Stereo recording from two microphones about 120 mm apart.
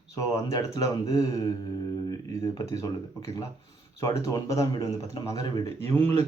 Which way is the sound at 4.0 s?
30° left (ahead or behind).